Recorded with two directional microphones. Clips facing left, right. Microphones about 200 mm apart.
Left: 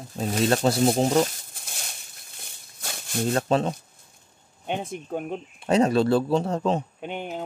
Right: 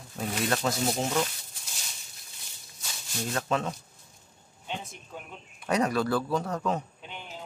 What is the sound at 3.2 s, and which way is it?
Speech, 30° left (ahead or behind).